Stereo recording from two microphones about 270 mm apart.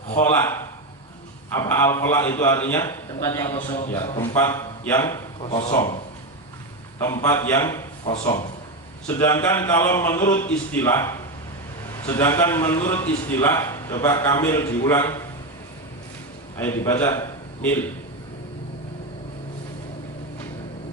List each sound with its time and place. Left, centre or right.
0.2 s a man's voice: centre
5.6 s a man's voice: left
7.0 s a man's voice: centre
16.6 s a man's voice: centre